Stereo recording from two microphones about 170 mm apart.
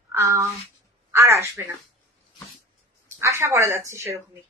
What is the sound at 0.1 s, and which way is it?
Speech, 15° right (ahead or behind).